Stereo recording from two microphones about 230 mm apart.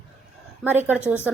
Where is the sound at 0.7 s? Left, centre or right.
Centre.